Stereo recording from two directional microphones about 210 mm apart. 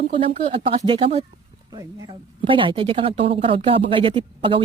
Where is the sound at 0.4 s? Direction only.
25° right (ahead or behind).